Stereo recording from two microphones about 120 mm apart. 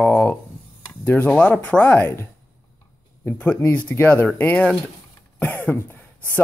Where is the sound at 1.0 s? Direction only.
15° left (ahead or behind).